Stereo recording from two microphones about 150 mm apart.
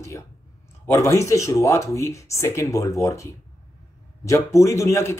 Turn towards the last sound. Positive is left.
turn(degrees=20)  # may be behind; listen again after turning